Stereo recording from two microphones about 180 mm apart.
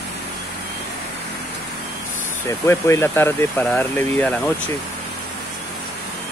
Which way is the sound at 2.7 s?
15° left (ahead or behind).